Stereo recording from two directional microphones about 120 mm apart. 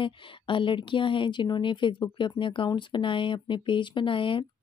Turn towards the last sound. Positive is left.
turn(degrees=45)  # may be behind; listen again after turning